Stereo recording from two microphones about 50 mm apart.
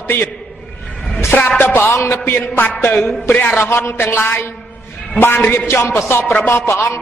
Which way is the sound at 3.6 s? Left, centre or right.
Left.